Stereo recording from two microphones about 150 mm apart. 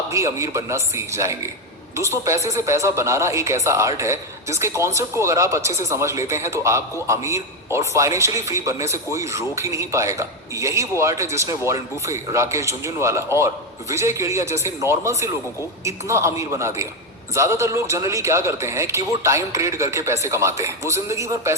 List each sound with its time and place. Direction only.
0.1 s speech: 20° right (ahead or behind)